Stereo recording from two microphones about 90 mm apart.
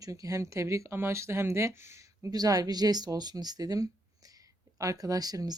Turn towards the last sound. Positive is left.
turn(degrees=-45)  # may be behind; listen again after turning